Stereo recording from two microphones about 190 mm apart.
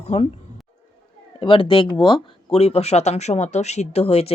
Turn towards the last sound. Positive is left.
turn(degrees=30)  # may be behind; listen again after turning